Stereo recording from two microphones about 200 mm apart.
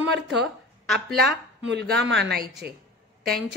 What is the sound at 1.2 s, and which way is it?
Speech, 60° right (ahead or behind).